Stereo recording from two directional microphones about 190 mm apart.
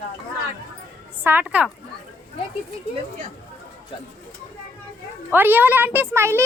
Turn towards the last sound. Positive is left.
turn(degrees=-15)  # may be behind; listen again after turning